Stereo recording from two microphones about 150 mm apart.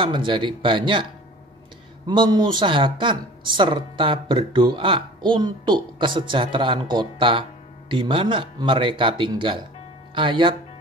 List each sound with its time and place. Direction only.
0.0 s speech: 30° right (ahead or behind)
2.0 s speech: 30° right (ahead or behind)